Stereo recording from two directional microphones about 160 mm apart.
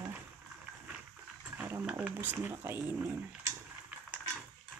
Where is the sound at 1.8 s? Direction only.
10° right (ahead or behind).